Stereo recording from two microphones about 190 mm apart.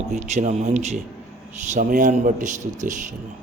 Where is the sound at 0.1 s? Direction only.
40° right (ahead or behind).